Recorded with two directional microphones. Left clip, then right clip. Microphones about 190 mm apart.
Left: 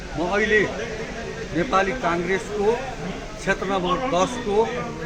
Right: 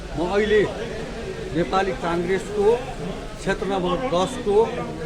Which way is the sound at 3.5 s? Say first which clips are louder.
Left 1 dB; 10° right (ahead or behind).